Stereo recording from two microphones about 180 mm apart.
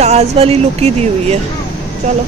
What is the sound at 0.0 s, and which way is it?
Speech, 35° right (ahead or behind).